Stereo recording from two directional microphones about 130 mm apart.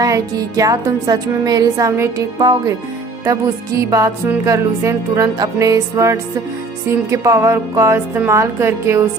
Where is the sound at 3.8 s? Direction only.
25° right (ahead or behind).